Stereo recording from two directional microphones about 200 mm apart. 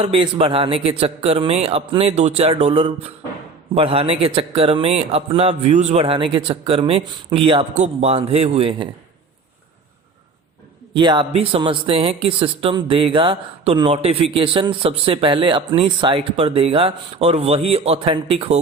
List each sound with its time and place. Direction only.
0.0 s a man's voice: 30° right (ahead or behind)
10.9 s a man's voice: 25° right (ahead or behind)